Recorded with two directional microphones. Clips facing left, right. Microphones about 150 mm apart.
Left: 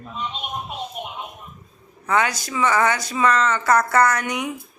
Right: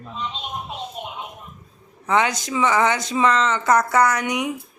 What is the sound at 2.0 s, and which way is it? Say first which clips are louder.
Speech: right 1 dB; 20° right (ahead or behind).